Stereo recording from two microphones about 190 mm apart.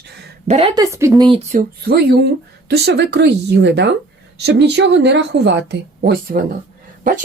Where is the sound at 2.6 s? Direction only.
60° right (ahead or behind).